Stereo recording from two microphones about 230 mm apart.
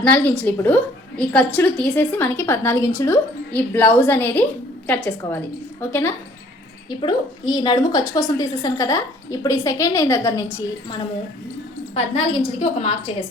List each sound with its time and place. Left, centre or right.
0.0 s a woman's voice: centre
12.1 s a woman's voice: left